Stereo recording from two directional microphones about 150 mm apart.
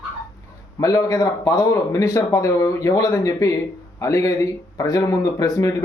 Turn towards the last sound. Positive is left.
turn(degrees=20)  # may be behind; listen again after turning